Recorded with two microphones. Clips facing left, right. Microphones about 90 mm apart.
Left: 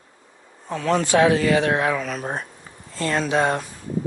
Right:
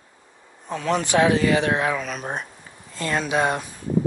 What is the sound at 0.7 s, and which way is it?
Speech, 20° right (ahead or behind).